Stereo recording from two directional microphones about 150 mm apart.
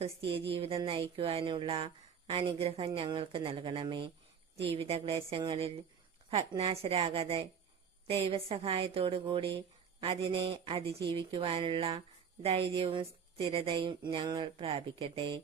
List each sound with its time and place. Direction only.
0.0 s a woman's voice: 40° right (ahead or behind)